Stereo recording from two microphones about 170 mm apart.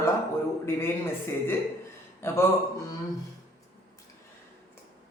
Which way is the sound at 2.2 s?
15° left (ahead or behind).